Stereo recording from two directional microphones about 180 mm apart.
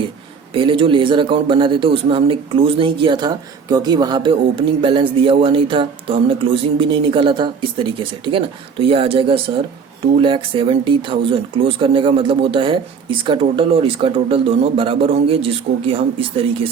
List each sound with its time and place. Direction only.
0.5 s speech: 30° right (ahead or behind)